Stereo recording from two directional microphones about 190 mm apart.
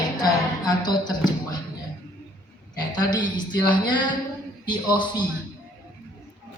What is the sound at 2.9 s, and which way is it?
A woman's voice, 20° left (ahead or behind).